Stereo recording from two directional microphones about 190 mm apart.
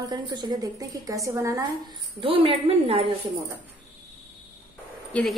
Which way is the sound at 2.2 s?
30° right (ahead or behind).